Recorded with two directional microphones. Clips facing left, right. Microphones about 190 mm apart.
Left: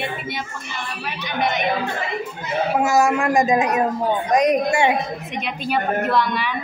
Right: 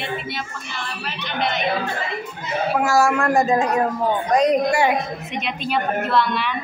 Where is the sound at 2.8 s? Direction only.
20° left (ahead or behind).